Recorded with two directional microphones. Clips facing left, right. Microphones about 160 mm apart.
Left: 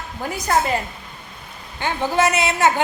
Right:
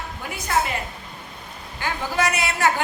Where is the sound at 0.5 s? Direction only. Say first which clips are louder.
Left 3 dB; 40° left (ahead or behind).